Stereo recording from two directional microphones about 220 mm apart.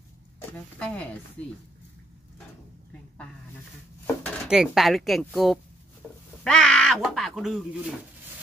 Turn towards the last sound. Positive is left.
turn(degrees=0)  # may be behind; listen again after turning